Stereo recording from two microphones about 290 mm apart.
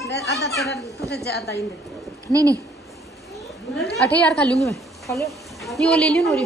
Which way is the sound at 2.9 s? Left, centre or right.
Centre.